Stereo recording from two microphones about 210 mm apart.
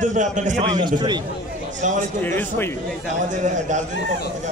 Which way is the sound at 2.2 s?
10° left (ahead or behind).